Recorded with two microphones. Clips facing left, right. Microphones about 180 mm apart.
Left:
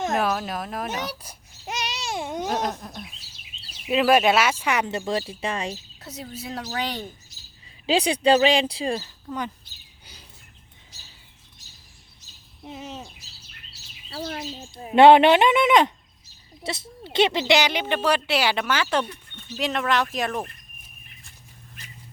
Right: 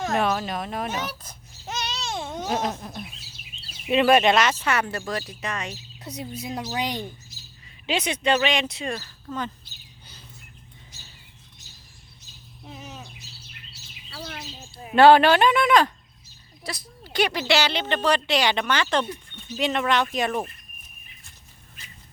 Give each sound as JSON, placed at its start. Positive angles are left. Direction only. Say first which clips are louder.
{"t": 0.2, "sound": "speech", "louder": "right 1 dB", "side_deg": 0}
{"t": 0.9, "sound": "babbling", "louder": "even", "side_deg": 10}
{"t": 2.5, "sound": "speech", "louder": "even", "side_deg": 0}
{"t": 6.0, "sound": "a woman's voice", "louder": "right 2 dB", "side_deg": -15}
{"t": 7.9, "sound": "speech", "louder": "left 4 dB", "side_deg": 35}
{"t": 9.2, "sound": "speech", "louder": "left 1 dB", "side_deg": 15}
{"t": 12.6, "sound": "speech", "louder": "left 4 dB", "side_deg": 25}
{"t": 14.1, "sound": "speech", "louder": "left 6 dB", "side_deg": 35}
{"t": 15.0, "sound": "speech", "louder": "left 1 dB", "side_deg": 20}
{"t": 19.0, "sound": "speech", "louder": "right 4 dB", "side_deg": -5}